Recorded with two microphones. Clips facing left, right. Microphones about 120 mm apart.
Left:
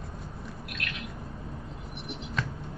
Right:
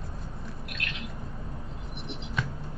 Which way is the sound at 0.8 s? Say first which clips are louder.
Left 1 dB; 30° right (ahead or behind).